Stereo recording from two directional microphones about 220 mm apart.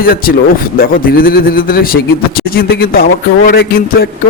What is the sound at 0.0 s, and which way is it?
A man's voice, 40° left (ahead or behind).